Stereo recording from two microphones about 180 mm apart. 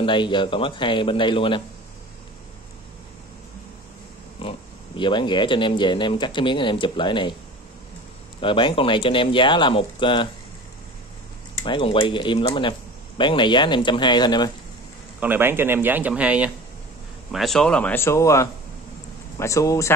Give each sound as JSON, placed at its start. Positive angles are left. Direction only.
{"t": 0.0, "sound": "speech", "side_deg": 25}
{"t": 4.4, "sound": "speech", "side_deg": 30}
{"t": 8.4, "sound": "speech", "side_deg": 30}
{"t": 11.5, "sound": "speech", "side_deg": 25}
{"t": 15.1, "sound": "speech", "side_deg": -10}